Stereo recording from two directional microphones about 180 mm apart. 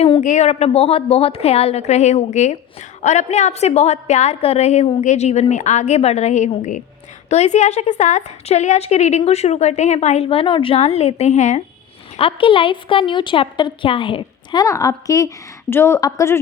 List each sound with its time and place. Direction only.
0.0 s a woman's voice: 35° left (ahead or behind)
12.1 s a woman's voice: 30° left (ahead or behind)